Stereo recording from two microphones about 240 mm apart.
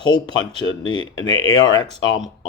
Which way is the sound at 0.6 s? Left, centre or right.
Left.